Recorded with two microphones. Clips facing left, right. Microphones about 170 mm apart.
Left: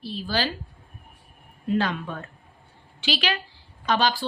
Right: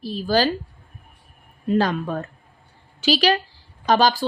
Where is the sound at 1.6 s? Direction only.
40° right (ahead or behind).